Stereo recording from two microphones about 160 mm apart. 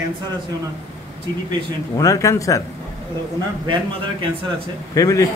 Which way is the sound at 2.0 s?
20° left (ahead or behind).